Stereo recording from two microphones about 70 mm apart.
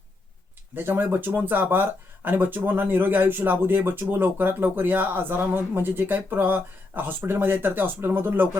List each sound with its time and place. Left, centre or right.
0.8 s speech: right